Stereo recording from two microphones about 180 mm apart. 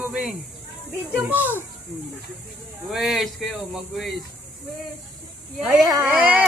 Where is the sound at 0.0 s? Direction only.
5° right (ahead or behind).